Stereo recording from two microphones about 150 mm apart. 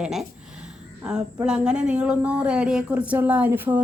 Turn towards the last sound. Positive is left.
turn(degrees=-10)  # may be behind; listen again after turning